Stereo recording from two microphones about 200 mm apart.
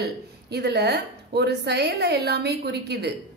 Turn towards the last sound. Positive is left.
turn(degrees=-55)  # may be behind; listen again after turning